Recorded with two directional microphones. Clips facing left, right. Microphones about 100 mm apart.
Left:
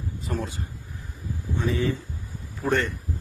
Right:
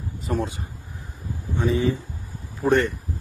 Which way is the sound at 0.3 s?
20° right (ahead or behind).